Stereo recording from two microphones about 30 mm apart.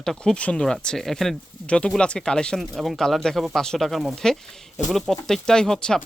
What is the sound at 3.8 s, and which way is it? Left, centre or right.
Speech, centre.